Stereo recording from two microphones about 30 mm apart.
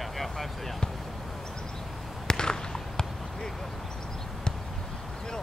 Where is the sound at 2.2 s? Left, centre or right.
Left.